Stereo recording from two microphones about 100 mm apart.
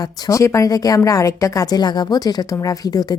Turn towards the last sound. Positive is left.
turn(degrees=40)  # may be behind; listen again after turning